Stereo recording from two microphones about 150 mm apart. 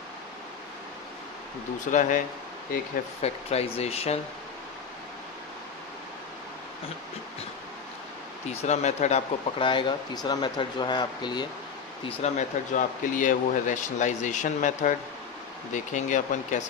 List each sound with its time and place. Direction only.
1.9 s speech: 60° left (ahead or behind)
3.2 s speech: 45° left (ahead or behind)
8.6 s speech: 50° left (ahead or behind)
9.6 s speech: 35° left (ahead or behind)
12.0 s speech: 45° left (ahead or behind)